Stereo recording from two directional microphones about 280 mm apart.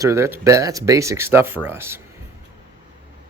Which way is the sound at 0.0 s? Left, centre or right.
Centre.